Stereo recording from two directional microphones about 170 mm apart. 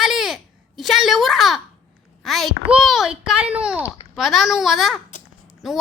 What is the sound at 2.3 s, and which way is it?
A child's voice, centre (ahead or behind).